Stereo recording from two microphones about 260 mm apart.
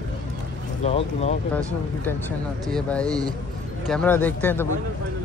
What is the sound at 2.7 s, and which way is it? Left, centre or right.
Speech, centre.